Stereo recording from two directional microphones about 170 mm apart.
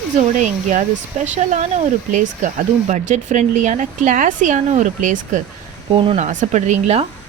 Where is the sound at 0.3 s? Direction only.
45° right (ahead or behind).